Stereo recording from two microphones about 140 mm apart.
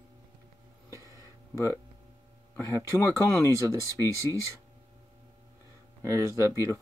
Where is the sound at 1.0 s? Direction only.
25° left (ahead or behind).